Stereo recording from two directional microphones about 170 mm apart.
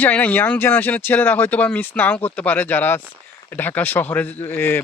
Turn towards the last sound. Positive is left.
turn(degrees=15)  # may be behind; listen again after turning